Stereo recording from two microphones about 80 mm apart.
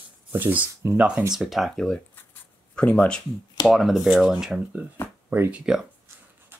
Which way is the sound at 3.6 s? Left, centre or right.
Centre.